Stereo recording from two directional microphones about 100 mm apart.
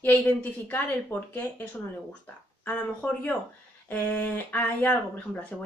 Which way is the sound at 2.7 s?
15° left (ahead or behind).